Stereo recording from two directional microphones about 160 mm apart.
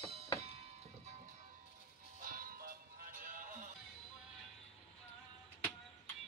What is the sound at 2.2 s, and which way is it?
Music, 60° right (ahead or behind).